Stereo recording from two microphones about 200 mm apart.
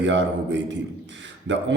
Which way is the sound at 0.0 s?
65° right (ahead or behind).